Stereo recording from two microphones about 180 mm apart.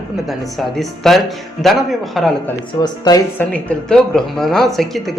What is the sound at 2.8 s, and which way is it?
Speech, 20° left (ahead or behind).